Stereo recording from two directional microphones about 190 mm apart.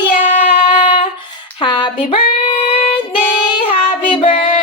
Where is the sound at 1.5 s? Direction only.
25° left (ahead or behind).